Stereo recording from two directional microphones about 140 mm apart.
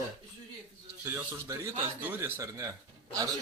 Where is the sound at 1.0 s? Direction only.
15° right (ahead or behind).